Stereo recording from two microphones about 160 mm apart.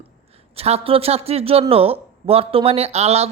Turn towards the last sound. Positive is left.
turn(degrees=-40)  # may be behind; listen again after turning